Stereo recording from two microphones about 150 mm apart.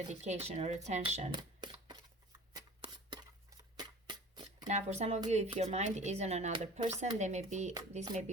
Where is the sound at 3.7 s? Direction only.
30° right (ahead or behind).